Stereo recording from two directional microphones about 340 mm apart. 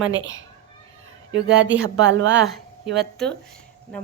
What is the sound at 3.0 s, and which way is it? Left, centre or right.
Speech, centre.